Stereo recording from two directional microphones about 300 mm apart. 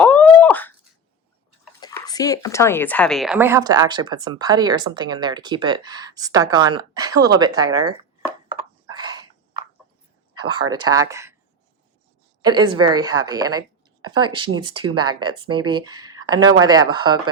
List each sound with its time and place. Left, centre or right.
0.0 s wail: centre
1.8 s a woman's voice: centre
8.9 s dog: centre
10.8 s a woman's voice: centre
12.4 s a woman's voice: centre